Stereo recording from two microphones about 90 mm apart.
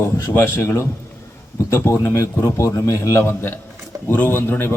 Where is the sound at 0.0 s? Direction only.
30° left (ahead or behind).